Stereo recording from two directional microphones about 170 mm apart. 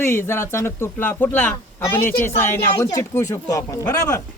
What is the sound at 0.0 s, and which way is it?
Speech, 15° left (ahead or behind).